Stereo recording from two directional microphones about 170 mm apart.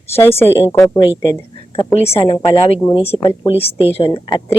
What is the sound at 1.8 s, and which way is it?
Speech, 35° left (ahead or behind).